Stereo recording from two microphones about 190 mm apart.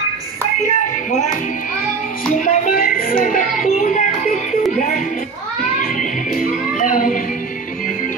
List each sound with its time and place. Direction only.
0.7 s music: 40° left (ahead or behind)
2.3 s music: 40° left (ahead or behind)